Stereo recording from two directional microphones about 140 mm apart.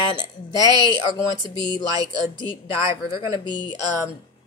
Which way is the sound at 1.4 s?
30° left (ahead or behind).